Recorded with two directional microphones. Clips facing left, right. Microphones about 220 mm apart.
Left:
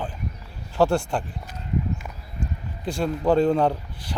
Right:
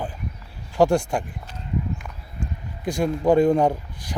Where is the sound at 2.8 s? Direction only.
15° right (ahead or behind).